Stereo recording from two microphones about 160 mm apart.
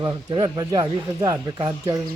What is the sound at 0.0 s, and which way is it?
Speech, 25° right (ahead or behind).